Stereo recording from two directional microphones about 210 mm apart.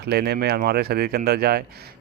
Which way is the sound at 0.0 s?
50° right (ahead or behind).